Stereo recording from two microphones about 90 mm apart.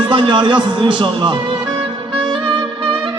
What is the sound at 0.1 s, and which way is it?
A man's voice, 65° right (ahead or behind).